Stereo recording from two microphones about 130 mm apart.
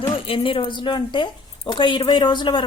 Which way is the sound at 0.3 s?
45° left (ahead or behind).